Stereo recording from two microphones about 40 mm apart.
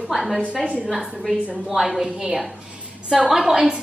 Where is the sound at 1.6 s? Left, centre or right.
Centre.